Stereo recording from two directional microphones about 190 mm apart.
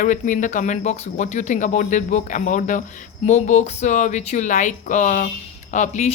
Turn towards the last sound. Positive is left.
turn(degrees=40)  # may be behind; listen again after turning